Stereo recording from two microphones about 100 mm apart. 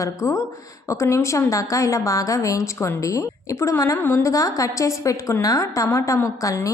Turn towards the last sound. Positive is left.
turn(degrees=35)  # may be behind; listen again after turning